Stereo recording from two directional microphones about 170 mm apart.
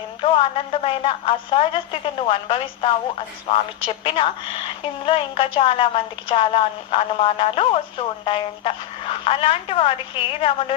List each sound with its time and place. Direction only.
0.2 s a woman's voice: 30° left (ahead or behind)